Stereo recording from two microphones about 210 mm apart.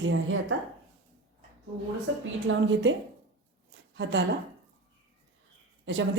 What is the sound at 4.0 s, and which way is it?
Speech, 60° right (ahead or behind).